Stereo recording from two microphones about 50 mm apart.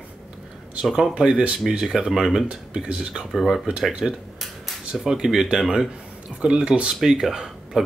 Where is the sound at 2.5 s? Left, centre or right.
Right.